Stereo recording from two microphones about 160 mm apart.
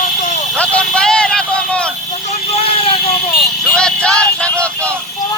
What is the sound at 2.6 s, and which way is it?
Vehicle, 35° left (ahead or behind).